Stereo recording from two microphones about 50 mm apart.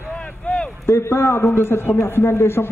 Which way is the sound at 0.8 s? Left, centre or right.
Left.